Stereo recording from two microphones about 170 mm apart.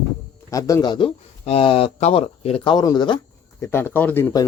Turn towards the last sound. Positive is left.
turn(degrees=10)  # may be behind; listen again after turning